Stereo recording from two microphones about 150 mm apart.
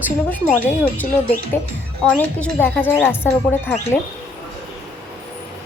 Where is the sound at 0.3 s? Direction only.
10° left (ahead or behind).